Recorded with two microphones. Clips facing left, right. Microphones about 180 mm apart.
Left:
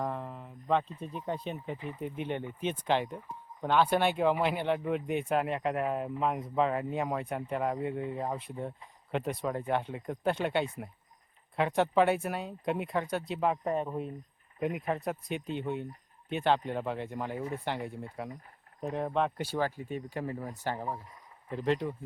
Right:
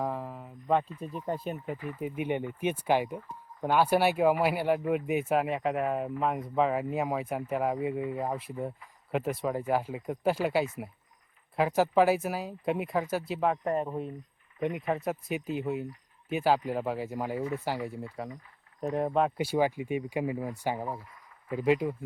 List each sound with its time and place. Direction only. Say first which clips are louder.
0.0 s a sound: right 2 dB; 5° right (ahead or behind)
0.9 s speech: right 2 dB; centre (ahead or behind)
1.7 s speech: right 2 dB; 20° left (ahead or behind)
2.0 s speech: right 5 dB; 10° right (ahead or behind)